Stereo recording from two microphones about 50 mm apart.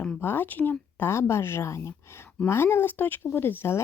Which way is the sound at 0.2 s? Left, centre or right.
Left.